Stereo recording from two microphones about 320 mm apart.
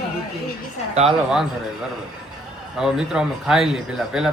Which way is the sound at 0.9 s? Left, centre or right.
Centre.